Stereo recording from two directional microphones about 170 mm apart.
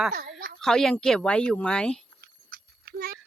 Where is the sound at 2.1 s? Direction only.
65° right (ahead or behind).